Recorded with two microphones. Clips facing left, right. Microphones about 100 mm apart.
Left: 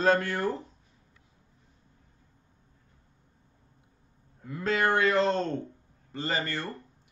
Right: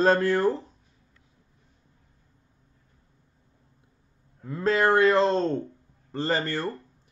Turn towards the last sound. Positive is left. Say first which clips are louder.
# right 5 dB
turn(degrees=-35)  # may be behind; listen again after turning